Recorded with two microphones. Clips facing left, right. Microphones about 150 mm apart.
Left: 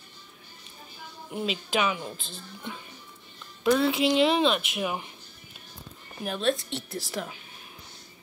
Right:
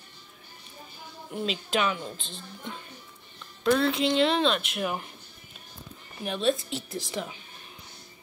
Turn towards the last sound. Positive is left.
turn(degrees=0)  # may be behind; listen again after turning